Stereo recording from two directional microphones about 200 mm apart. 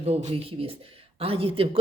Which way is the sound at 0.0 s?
30° right (ahead or behind).